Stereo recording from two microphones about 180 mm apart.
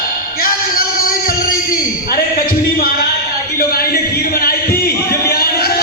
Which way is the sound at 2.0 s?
55° left (ahead or behind).